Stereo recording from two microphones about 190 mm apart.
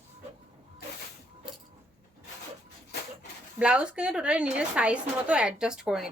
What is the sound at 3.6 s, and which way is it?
A woman's voice, 5° right (ahead or behind).